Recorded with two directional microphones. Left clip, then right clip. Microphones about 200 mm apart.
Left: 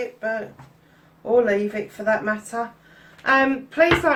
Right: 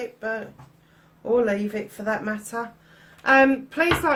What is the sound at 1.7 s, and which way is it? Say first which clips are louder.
Speech: left 5 dB; 50° right (ahead or behind).